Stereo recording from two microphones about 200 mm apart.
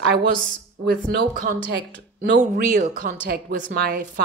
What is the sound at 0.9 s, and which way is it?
A woman's voice, 45° right (ahead or behind).